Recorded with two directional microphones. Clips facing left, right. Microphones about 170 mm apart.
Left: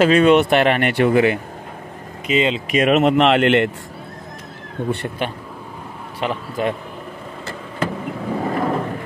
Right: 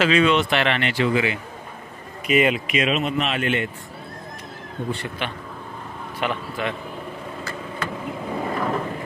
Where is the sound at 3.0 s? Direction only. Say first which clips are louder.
Left 10 dB; 75° left (ahead or behind).